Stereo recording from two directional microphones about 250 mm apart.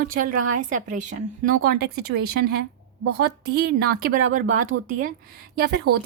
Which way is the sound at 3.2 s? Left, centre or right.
Right.